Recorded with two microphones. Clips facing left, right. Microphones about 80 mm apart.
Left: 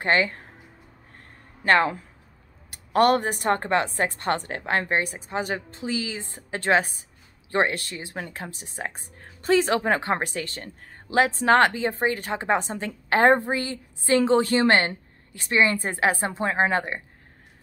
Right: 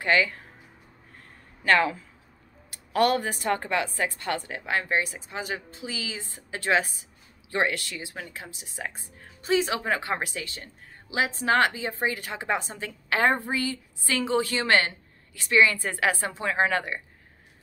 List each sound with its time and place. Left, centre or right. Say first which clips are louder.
0.0 s speech: left 1 dB; left
2.9 s a woman's voice: left 4 dB; left